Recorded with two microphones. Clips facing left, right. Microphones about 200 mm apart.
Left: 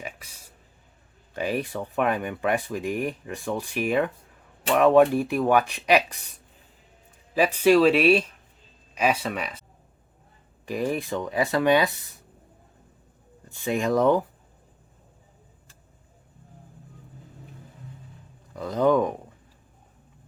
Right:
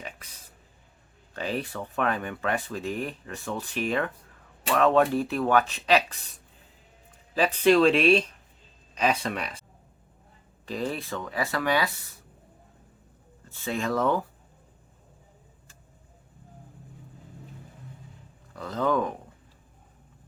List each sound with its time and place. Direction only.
0.0 s a sound: 10° left (ahead or behind)
1.3 s speech: 10° left (ahead or behind)
7.3 s speech: 10° left (ahead or behind)
10.7 s speech: 15° left (ahead or behind)
13.5 s speech: 15° left (ahead or behind)
18.5 s speech: 15° left (ahead or behind)